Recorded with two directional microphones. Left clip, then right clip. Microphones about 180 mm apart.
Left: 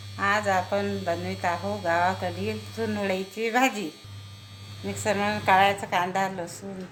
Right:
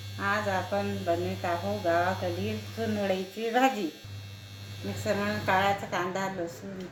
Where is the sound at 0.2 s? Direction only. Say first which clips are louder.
Left 5 dB; 65° left (ahead or behind).